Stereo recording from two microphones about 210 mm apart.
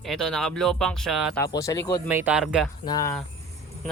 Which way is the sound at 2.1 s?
10° right (ahead or behind).